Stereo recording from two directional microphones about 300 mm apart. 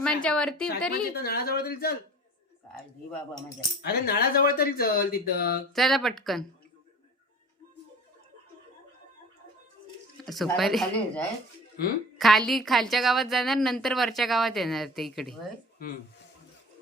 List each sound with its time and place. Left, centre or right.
0.0 s a woman's voice: centre
0.9 s speech: left
3.8 s speech: left
5.7 s a woman's voice: centre
10.2 s a woman's voice: centre